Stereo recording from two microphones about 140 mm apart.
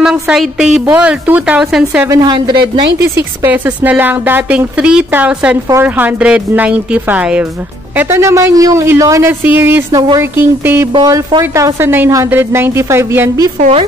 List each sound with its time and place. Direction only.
0.0 s a woman's voice: 5° right (ahead or behind)
2.0 s a woman's voice: 30° right (ahead or behind)
3.2 s a man's voice: 15° right (ahead or behind)
9.8 s a man's voice: 30° right (ahead or behind)
11.2 s speech: 25° right (ahead or behind)